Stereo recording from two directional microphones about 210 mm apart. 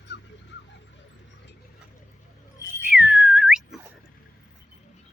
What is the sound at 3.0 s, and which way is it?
Whistling, centre (ahead or behind).